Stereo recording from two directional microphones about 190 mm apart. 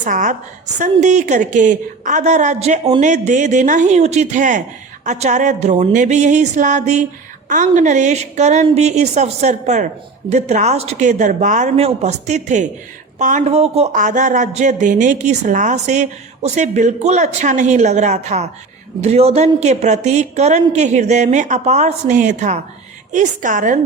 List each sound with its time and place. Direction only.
0.0 s a woman's voice: 40° right (ahead or behind)